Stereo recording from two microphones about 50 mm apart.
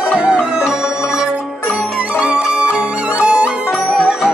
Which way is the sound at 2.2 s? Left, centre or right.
Right.